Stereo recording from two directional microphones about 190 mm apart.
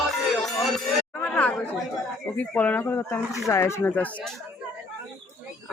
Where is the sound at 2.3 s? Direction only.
10° left (ahead or behind).